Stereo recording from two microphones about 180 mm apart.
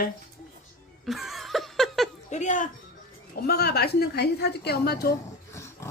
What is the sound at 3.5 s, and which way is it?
A woman's voice, 60° left (ahead or behind).